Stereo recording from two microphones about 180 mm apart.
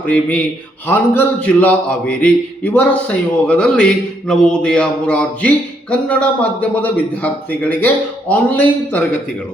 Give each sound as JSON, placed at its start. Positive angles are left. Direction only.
{"t": 0.0, "sound": "speech", "side_deg": 10}